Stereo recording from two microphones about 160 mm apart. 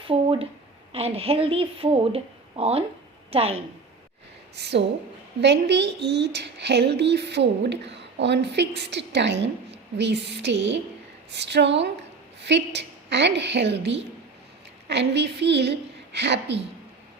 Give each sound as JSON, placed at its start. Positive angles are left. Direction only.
{"t": 0.1, "sound": "a sound", "side_deg": -35}
{"t": 0.9, "sound": "a woman's voice", "side_deg": -40}
{"t": 4.5, "sound": "speech", "side_deg": -90}